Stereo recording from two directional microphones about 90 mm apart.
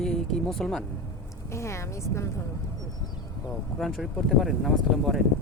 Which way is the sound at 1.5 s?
30° left (ahead or behind).